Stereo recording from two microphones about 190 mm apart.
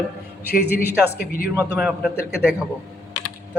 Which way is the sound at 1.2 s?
50° left (ahead or behind).